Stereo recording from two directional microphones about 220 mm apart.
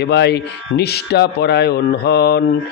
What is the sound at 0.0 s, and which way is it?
A man's voice, 50° left (ahead or behind).